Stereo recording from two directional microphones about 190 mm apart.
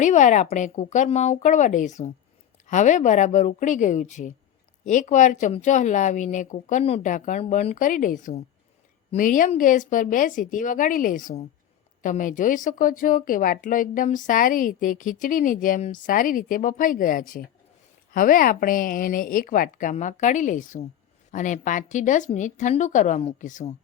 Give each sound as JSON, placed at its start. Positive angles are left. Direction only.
{"t": 0.0, "sound": "a woman's voice", "side_deg": 40}